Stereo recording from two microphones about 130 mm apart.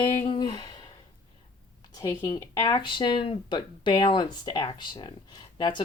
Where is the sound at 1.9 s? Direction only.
30° left (ahead or behind).